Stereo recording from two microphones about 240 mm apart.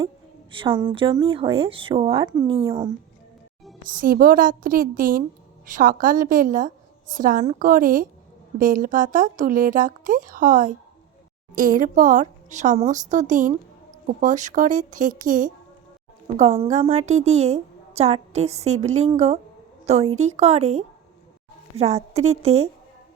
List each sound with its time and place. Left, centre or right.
0.5 s a woman's voice: right
3.9 s speech: right
11.8 s a woman's voice: right